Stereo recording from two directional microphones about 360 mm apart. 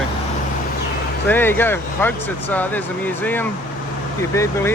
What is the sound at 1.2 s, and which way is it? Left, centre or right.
Speech, centre.